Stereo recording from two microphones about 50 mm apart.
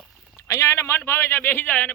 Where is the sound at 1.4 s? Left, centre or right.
Left.